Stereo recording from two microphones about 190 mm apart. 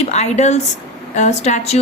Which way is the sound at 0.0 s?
35° left (ahead or behind).